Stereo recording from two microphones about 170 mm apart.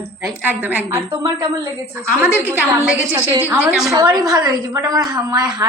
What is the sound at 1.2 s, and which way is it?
Speech, 25° right (ahead or behind).